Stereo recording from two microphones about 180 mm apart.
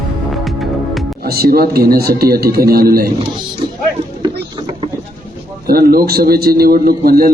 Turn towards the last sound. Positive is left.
turn(degrees=-55)  # may be behind; listen again after turning